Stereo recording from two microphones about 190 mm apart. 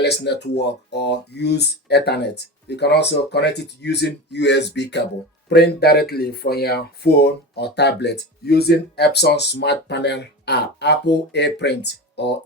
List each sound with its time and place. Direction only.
0.0 s speech: 60° left (ahead or behind)